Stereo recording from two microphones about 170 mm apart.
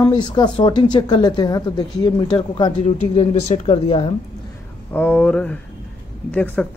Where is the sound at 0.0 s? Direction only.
25° left (ahead or behind).